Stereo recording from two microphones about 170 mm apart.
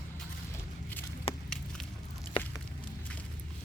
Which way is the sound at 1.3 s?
35° left (ahead or behind).